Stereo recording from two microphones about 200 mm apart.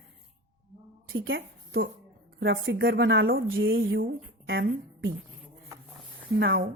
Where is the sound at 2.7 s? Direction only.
60° right (ahead or behind); by 4.0 s 75° right (ahead or behind).